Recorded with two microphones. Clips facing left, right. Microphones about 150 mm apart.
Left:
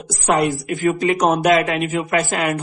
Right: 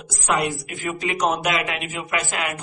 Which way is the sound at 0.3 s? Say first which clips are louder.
Left 6 dB; 45° left (ahead or behind).